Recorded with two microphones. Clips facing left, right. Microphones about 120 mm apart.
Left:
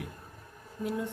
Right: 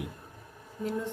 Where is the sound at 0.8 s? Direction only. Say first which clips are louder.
Right 1 dB; 10° left (ahead or behind).